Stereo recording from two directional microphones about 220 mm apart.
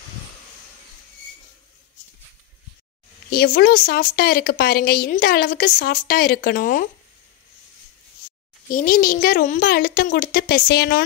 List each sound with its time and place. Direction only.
3.3 s speech: 45° left (ahead or behind)
8.6 s a woman's voice: 40° left (ahead or behind)